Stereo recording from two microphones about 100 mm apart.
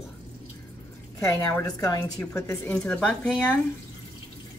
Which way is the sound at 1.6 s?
35° left (ahead or behind).